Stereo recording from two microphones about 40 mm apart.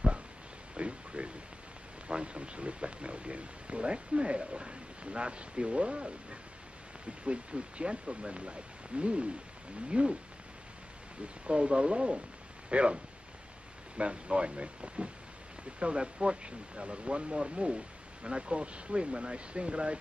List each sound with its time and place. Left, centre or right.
0.7 s a sound: right
2.0 s speech: right
7.2 s speech: right
11.4 s speech: right